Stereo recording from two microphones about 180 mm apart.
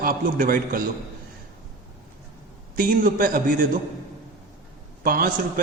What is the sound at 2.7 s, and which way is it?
Speech, 50° right (ahead or behind).